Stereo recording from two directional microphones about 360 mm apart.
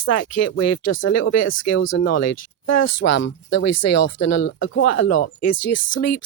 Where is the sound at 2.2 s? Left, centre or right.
Left.